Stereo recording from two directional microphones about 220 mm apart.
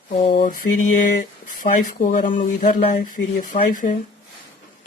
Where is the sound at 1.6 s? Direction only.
35° left (ahead or behind).